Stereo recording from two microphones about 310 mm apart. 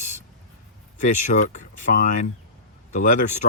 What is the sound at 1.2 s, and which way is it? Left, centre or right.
Speech, left.